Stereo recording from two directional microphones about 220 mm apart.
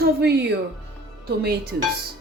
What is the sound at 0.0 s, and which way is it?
Speech, 50° right (ahead or behind).